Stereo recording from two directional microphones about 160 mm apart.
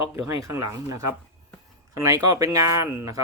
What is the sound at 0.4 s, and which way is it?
Speech, 20° right (ahead or behind).